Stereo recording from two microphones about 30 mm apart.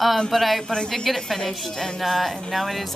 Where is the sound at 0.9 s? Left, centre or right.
Centre.